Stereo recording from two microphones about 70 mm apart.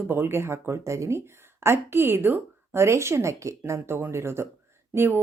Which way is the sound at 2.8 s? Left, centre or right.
Right.